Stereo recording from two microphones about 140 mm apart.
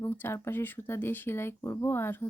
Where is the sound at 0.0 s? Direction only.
15° left (ahead or behind).